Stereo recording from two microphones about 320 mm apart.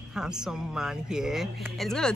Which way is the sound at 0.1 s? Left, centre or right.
Centre.